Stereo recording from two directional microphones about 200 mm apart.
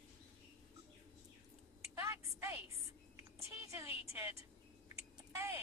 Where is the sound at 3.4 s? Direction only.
15° right (ahead or behind).